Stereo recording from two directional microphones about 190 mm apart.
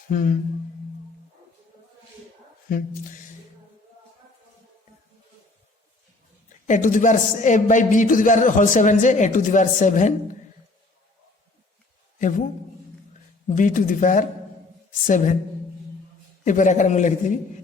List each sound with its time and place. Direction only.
0.1 s speech: 45° left (ahead or behind)
2.6 s speech: 45° left (ahead or behind)
6.7 s a man's voice: 45° left (ahead or behind)
13.6 s a man's voice: 45° left (ahead or behind)
16.4 s a man's voice: 40° left (ahead or behind)